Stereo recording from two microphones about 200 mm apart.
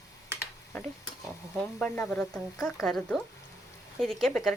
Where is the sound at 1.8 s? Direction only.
5° left (ahead or behind).